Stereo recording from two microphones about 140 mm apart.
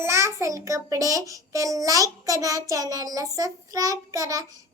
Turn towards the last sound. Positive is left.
turn(degrees=-25)  # may be behind; listen again after turning